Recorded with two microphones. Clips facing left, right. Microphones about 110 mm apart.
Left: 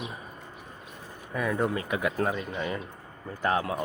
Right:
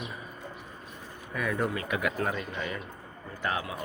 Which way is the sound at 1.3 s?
25° left (ahead or behind).